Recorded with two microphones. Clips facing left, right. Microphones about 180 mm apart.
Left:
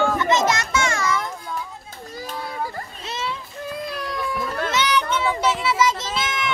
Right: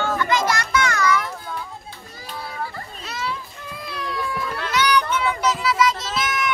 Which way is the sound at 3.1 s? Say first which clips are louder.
Even; 25° left (ahead or behind).